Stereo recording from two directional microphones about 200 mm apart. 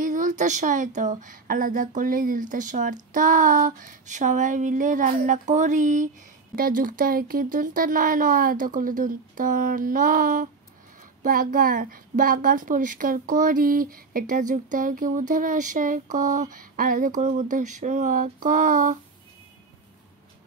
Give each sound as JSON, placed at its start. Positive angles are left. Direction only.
{"t": 0.0, "sound": "speech", "side_deg": -40}